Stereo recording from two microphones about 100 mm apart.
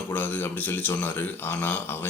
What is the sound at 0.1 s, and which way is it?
Speech, 20° left (ahead or behind).